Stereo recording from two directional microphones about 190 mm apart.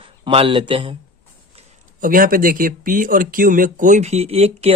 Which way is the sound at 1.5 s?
40° right (ahead or behind).